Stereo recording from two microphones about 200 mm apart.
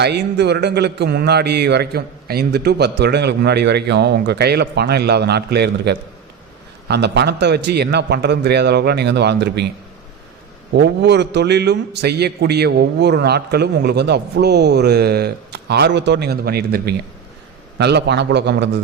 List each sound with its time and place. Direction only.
0.0 s a man's voice: 55° right (ahead or behind)
10.8 s a man's voice: 55° right (ahead or behind)